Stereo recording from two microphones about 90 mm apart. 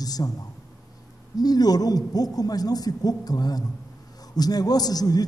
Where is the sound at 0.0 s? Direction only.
45° left (ahead or behind).